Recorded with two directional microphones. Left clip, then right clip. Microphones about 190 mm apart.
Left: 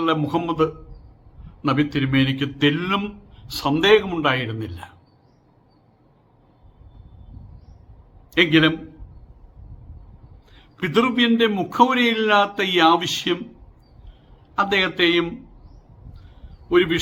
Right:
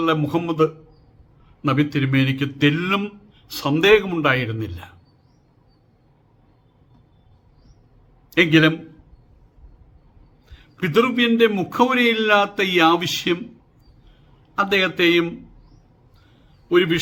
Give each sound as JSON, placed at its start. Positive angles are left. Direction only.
{"t": 0.0, "sound": "a man's voice", "side_deg": -5}
{"t": 8.3, "sound": "a man's voice", "side_deg": -5}
{"t": 10.5, "sound": "a man's voice", "side_deg": -5}
{"t": 14.5, "sound": "a man's voice", "side_deg": -5}
{"t": 16.6, "sound": "a man's voice", "side_deg": -5}